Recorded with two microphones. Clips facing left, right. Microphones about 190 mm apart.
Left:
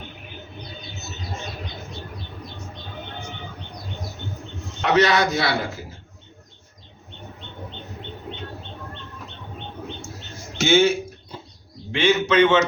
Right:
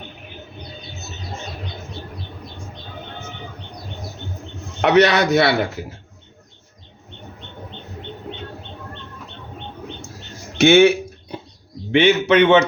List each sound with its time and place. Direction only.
4.8 s a man's voice: 65° right (ahead or behind)
10.6 s a sound: 65° right (ahead or behind)
11.9 s a man's voice: 60° right (ahead or behind)